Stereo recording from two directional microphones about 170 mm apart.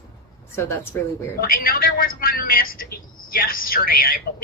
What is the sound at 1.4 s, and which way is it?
A woman's voice, 60° left (ahead or behind).